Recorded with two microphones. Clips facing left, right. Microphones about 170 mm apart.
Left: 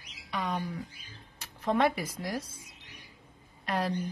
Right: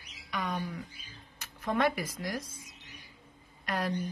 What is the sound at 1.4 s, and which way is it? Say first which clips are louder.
Speech: left 2 dB; 30° left (ahead or behind).